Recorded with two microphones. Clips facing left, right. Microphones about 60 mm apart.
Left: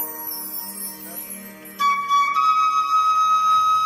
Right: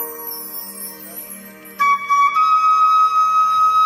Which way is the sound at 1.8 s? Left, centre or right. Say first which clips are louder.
Right 4 dB; right.